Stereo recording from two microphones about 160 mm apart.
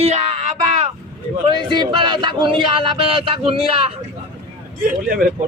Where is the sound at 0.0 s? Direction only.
45° right (ahead or behind).